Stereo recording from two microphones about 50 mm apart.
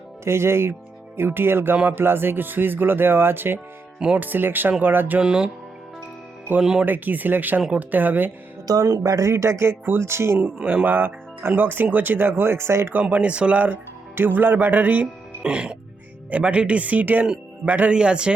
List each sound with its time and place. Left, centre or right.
0.3 s speech: right
1.7 s speech: right
2.0 s speech: right
5.2 s speech: centre
6.6 s speech: centre
6.8 s speech: right
9.2 s speech: right
10.8 s speech: right
12.9 s speech: right
14.2 s speech: right
15.4 s speech: right
17.9 s speech: centre